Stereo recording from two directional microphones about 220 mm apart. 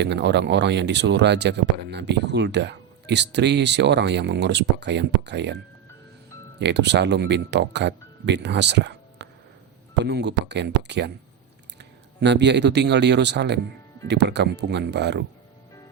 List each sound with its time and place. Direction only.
0.0 s speech: 50° right (ahead or behind)
6.6 s speech: 50° right (ahead or behind)